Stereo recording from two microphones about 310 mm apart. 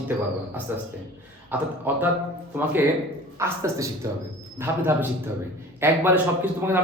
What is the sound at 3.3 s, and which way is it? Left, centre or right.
A man's voice, centre.